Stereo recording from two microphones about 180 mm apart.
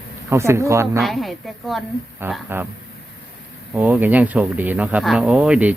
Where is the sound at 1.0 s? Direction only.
Centre (ahead or behind).